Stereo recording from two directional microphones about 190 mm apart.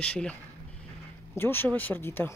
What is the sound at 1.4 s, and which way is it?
Speech, 10° left (ahead or behind).